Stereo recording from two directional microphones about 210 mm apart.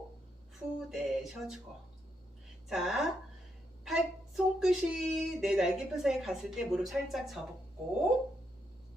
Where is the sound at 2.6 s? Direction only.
Centre (ahead or behind).